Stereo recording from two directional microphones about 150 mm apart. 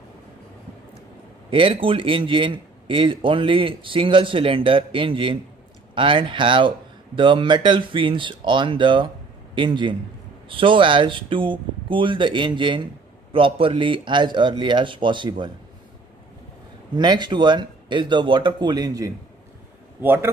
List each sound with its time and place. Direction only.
1.5 s a man's voice: 35° right (ahead or behind)
16.9 s speech: 30° right (ahead or behind)
20.0 s speech: 15° right (ahead or behind)